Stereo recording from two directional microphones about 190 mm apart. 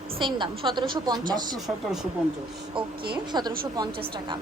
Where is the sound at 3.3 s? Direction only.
20° right (ahead or behind).